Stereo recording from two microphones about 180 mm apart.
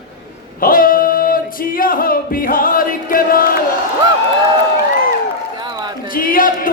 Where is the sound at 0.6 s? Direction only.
50° left (ahead or behind).